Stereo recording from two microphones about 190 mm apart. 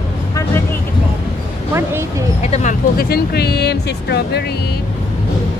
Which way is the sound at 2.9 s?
50° left (ahead or behind).